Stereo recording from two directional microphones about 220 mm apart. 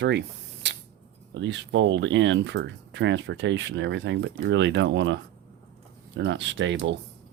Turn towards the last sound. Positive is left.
turn(degrees=-55)  # may be behind; listen again after turning